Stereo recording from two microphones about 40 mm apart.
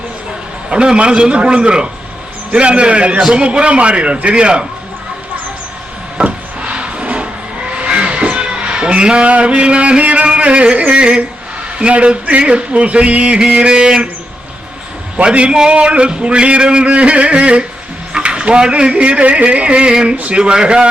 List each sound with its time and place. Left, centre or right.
0.7 s speech: right
6.2 s a sound: right
7.8 s music: right
11.8 s a sound: right
13.4 s speech: right
15.2 s speech: right